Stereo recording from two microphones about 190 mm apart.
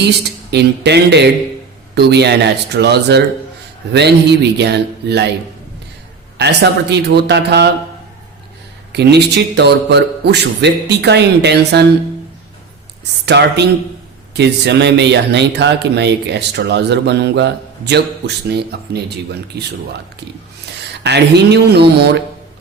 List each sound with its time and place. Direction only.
0.5 s speech: 60° right (ahead or behind)
6.3 s speech: 60° right (ahead or behind)
8.9 s speech: 60° right (ahead or behind)
13.2 s speech: 60° right (ahead or behind)
20.7 s a sound: 65° right (ahead or behind)
21.0 s speech: 60° right (ahead or behind)